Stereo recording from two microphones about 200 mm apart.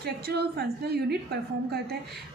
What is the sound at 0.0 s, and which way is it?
A woman's voice, 55° right (ahead or behind).